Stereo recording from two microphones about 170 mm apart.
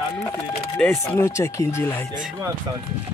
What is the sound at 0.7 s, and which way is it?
Speech, 15° left (ahead or behind).